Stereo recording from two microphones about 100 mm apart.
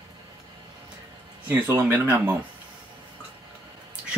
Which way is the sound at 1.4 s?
20° right (ahead or behind).